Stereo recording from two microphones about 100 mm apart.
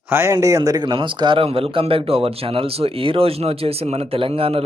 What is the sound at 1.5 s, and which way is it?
Speech, 70° right (ahead or behind).